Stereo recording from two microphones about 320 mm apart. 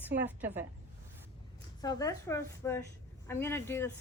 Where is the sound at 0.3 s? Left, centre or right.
Centre.